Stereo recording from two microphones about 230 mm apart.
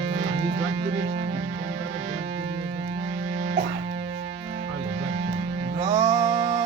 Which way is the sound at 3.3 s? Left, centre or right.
Right.